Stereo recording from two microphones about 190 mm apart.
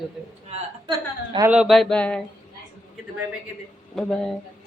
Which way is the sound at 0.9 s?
20° right (ahead or behind).